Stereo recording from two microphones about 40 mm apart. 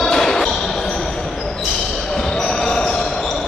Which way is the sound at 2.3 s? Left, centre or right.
Centre.